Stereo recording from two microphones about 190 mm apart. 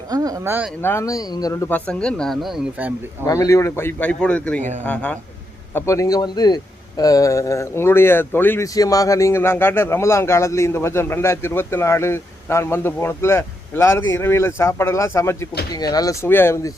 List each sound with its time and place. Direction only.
0.1 s speech: 20° right (ahead or behind)
0.8 s speech: 15° left (ahead or behind)
1.9 s speech: 5° left (ahead or behind)
3.2 s speech: 20° left (ahead or behind)
5.7 s speech: 15° left (ahead or behind)